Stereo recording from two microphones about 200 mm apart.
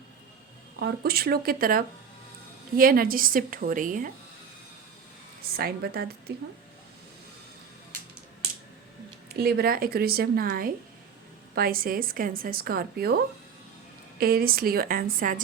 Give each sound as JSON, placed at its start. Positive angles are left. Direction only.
{"t": 0.8, "sound": "speech", "side_deg": -55}
{"t": 5.5, "sound": "speech", "side_deg": -50}
{"t": 9.3, "sound": "speech", "side_deg": -50}